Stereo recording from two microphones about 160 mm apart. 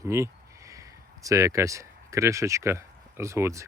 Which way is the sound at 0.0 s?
20° right (ahead or behind).